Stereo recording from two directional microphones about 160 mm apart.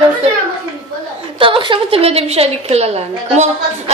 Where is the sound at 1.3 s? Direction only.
35° right (ahead or behind).